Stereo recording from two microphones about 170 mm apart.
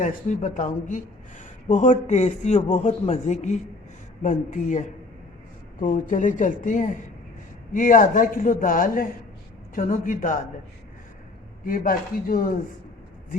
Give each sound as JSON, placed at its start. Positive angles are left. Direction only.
{"t": 0.0, "sound": "speech", "side_deg": 45}
{"t": 11.6, "sound": "speech", "side_deg": 55}